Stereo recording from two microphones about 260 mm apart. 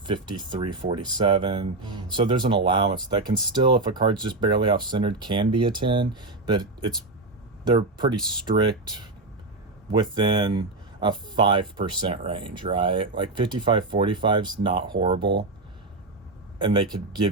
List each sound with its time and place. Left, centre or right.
0.0 s speech: centre
9.9 s speech: centre
16.6 s speech: centre